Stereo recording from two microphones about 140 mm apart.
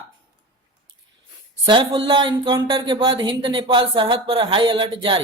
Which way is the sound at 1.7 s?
35° right (ahead or behind).